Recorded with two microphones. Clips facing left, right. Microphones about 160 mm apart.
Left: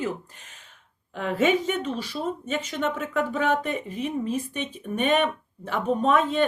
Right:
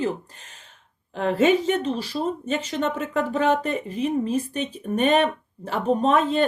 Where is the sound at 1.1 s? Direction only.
35° right (ahead or behind).